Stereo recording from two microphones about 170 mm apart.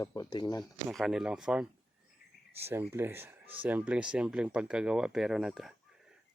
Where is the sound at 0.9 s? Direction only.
Centre (ahead or behind).